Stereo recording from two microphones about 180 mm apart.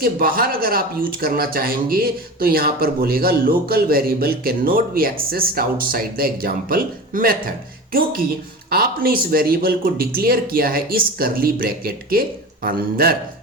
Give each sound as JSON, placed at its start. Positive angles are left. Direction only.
{"t": 0.0, "sound": "a man's voice", "side_deg": -55}
{"t": 8.7, "sound": "a man's voice", "side_deg": -55}